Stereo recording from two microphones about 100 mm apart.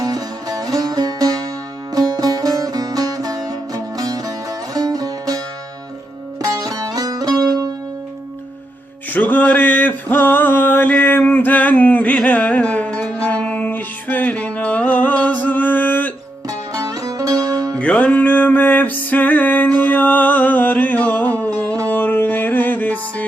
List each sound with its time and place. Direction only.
0.0 s music: 40° right (ahead or behind)
6.4 s music: 35° right (ahead or behind)
9.0 s a sound: 15° left (ahead or behind)
16.5 s music: 35° right (ahead or behind)
17.7 s music: 10° left (ahead or behind)